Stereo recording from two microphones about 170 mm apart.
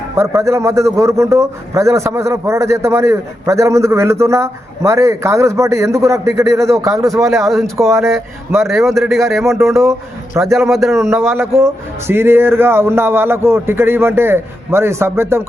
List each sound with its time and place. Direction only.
0.2 s a man's voice: 15° right (ahead or behind)
7.3 s speech: centre (ahead or behind)
7.9 s a man's voice: 15° right (ahead or behind)
8.9 s speech: centre (ahead or behind)
9.4 s a man's voice: 15° right (ahead or behind)
10.6 s speech: centre (ahead or behind)
10.9 s a man's voice: 15° right (ahead or behind)